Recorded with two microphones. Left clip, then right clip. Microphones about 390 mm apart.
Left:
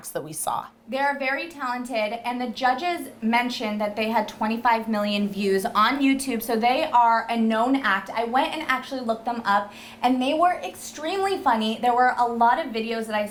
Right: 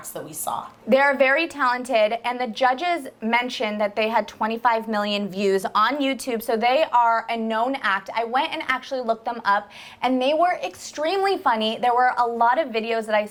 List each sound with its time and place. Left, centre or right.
0.1 s a woman's voice: left
0.9 s a woman's voice: right